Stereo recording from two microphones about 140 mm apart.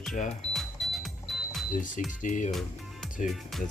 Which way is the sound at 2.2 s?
65° left (ahead or behind).